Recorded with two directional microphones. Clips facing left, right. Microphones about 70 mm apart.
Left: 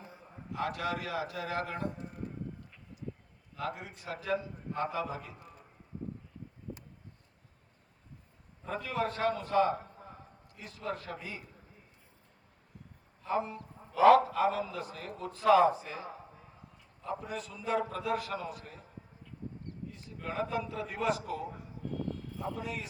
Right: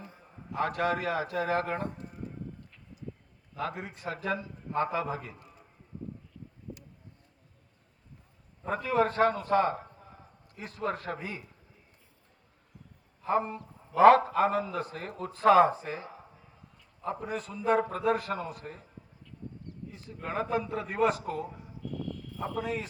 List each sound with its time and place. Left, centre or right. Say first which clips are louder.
0.5 s a man's voice: right 5 dB; right
3.5 s a man's voice: right 3 dB; right
8.6 s a man's voice: right 7 dB; right
13.2 s a man's voice: right 4 dB; right
20.2 s a man's voice: right 3 dB; right